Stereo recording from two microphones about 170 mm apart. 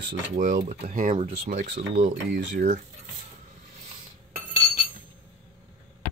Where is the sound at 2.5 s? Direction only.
50° right (ahead or behind).